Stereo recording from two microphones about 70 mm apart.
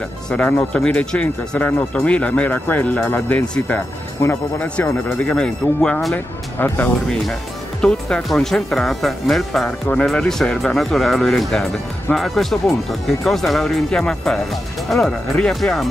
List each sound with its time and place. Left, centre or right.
0.3 s speech: left
4.2 s speech: left
5.3 s speech: centre
6.1 s speech: left
7.8 s speech: centre
9.7 s speech: centre